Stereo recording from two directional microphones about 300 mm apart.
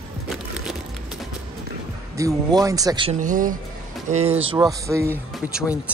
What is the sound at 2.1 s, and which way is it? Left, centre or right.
Speech, centre.